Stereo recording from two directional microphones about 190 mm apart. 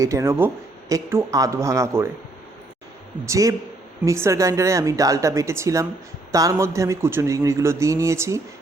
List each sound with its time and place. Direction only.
0.0 s speech: 15° right (ahead or behind)
3.2 s speech: 15° right (ahead or behind)